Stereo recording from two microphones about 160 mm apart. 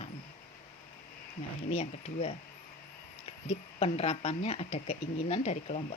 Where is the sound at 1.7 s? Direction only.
40° left (ahead or behind).